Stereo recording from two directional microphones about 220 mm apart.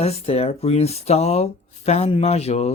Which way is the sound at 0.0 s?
30° left (ahead or behind).